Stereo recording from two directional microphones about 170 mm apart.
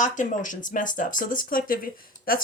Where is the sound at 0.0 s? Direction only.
50° left (ahead or behind).